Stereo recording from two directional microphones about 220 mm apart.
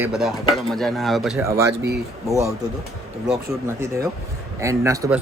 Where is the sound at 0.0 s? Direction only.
5° right (ahead or behind).